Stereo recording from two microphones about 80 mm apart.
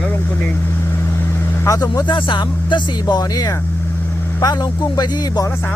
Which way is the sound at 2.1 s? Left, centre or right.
Left.